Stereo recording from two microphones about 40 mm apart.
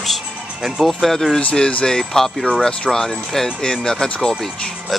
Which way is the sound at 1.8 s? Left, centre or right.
Centre.